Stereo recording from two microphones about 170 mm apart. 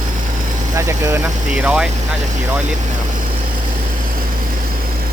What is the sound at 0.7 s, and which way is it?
Speech, 20° right (ahead or behind).